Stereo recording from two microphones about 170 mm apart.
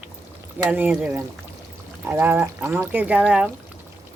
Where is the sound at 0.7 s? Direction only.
10° right (ahead or behind).